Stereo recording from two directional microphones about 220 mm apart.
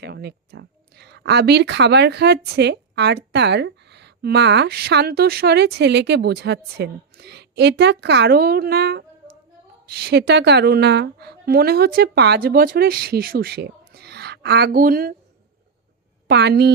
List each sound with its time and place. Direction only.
0.0 s speech: 50° right (ahead or behind)
16.2 s a woman's voice: 50° right (ahead or behind)